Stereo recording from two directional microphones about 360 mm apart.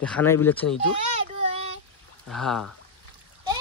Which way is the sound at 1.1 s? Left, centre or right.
Centre.